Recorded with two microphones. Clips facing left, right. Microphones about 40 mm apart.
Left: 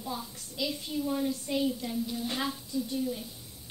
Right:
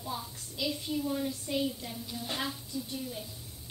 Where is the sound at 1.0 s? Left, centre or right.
Centre.